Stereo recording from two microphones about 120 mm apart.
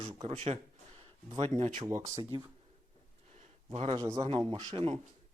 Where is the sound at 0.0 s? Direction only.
60° right (ahead or behind).